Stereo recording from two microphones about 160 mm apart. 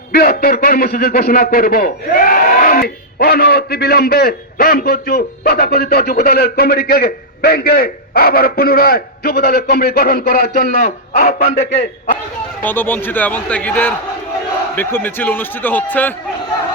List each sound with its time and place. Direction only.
0.1 s a man's voice: 70° left (ahead or behind); by 11.8 s 50° left (ahead or behind)
12.6 s speech: 10° left (ahead or behind)